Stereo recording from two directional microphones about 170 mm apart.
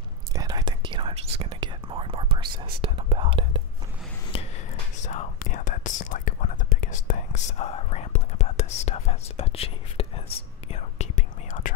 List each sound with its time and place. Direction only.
0.3 s whispering: 20° right (ahead or behind)
4.3 s a sound: 30° left (ahead or behind)
5.0 s speech: 45° left (ahead or behind)